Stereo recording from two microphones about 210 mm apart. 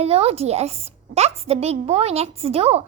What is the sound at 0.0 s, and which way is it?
A woman's voice, 30° right (ahead or behind).